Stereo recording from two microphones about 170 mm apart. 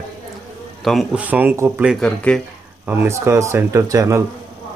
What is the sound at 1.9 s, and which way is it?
Speech, 5° left (ahead or behind).